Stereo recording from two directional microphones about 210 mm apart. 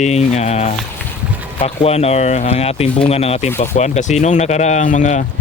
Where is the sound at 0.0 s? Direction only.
30° left (ahead or behind).